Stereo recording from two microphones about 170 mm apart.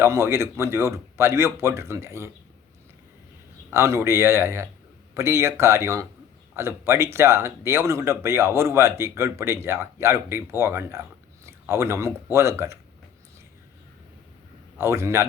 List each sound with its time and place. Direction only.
0.0 s speech: 15° right (ahead or behind)
3.7 s speech: 15° right (ahead or behind)
14.8 s speech: 15° right (ahead or behind)